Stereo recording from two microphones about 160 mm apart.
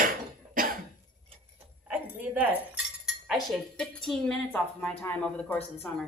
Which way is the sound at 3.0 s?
Centre (ahead or behind).